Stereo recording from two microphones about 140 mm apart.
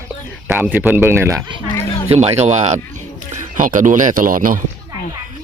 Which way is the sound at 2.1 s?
50° right (ahead or behind).